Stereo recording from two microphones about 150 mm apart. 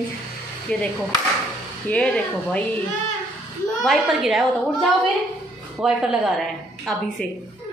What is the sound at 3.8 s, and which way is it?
Speech, centre (ahead or behind).